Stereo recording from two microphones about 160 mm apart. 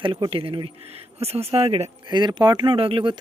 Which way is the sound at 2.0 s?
30° right (ahead or behind).